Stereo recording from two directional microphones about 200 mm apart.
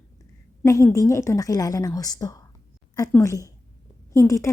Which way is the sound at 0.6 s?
15° left (ahead or behind).